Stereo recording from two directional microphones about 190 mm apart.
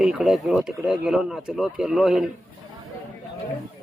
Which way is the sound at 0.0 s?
5° right (ahead or behind).